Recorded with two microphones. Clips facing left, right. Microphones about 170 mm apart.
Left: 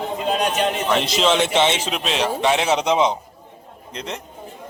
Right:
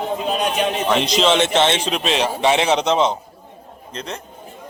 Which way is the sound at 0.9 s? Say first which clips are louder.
Right 3 dB; 5° left (ahead or behind).